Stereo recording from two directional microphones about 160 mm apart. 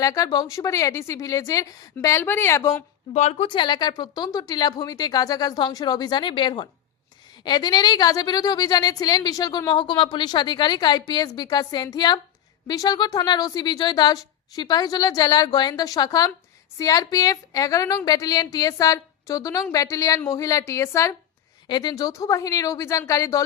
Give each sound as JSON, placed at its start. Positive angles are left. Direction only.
{"t": 0.0, "sound": "a woman's voice", "side_deg": 20}
{"t": 3.1, "sound": "a woman's voice", "side_deg": 45}
{"t": 3.5, "sound": "a woman's voice", "side_deg": 30}